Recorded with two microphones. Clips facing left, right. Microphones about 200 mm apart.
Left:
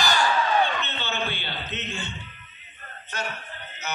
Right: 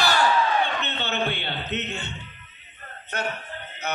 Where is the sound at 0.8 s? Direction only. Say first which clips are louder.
Right 3 dB; 65° right (ahead or behind).